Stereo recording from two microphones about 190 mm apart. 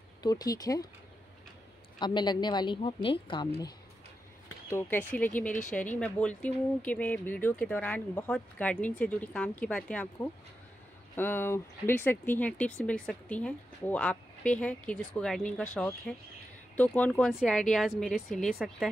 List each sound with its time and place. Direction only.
0.2 s speech: 20° left (ahead or behind)
2.0 s speech: 25° left (ahead or behind)
4.6 s speech: 10° left (ahead or behind)